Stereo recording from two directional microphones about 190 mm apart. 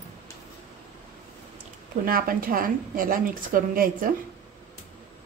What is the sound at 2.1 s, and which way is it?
A woman's voice, 50° right (ahead or behind).